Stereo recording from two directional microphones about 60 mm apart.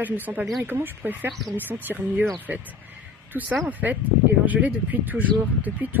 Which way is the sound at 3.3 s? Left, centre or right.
Right.